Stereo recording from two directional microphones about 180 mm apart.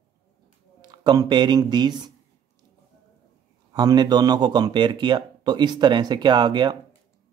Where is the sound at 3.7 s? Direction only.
25° right (ahead or behind).